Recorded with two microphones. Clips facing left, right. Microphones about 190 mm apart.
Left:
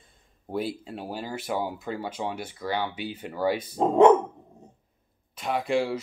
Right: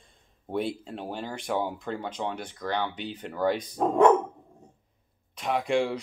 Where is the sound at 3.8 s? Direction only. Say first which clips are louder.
Left 3 dB; 20° left (ahead or behind).